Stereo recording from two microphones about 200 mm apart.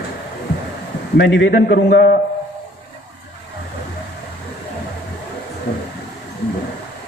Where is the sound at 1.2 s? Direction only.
60° left (ahead or behind).